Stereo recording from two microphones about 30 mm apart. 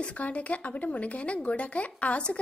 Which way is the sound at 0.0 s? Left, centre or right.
Left.